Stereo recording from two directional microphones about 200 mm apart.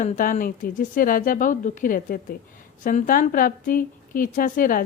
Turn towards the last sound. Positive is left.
turn(degrees=45)  # may be behind; listen again after turning